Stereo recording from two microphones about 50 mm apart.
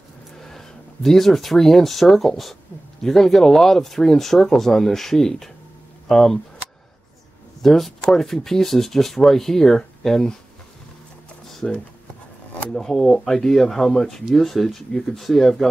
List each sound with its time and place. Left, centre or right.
0.4 s speech: centre
7.6 s speech: centre
11.6 s speech: centre